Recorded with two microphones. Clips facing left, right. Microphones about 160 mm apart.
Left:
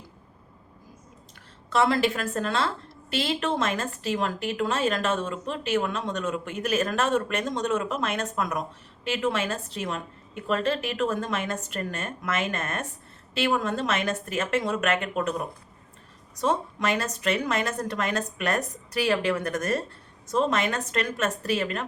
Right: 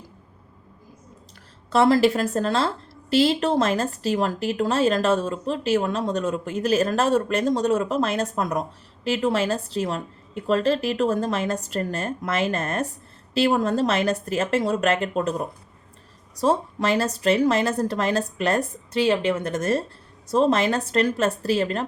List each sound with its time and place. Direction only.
1.7 s speech: 35° right (ahead or behind)